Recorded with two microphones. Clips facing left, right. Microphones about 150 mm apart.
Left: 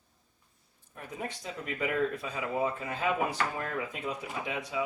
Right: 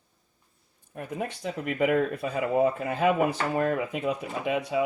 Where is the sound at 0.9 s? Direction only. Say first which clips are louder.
Right 6 dB; 65° right (ahead or behind).